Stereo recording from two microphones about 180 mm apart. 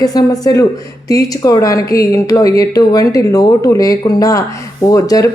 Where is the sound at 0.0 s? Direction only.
20° left (ahead or behind).